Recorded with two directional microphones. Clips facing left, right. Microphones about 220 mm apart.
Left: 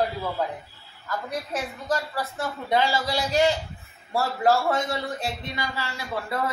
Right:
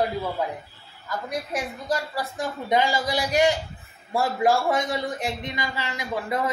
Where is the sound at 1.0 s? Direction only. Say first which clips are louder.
Right 1 dB; 15° right (ahead or behind).